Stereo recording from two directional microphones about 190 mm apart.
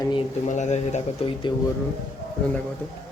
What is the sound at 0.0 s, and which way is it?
Speech, 25° left (ahead or behind).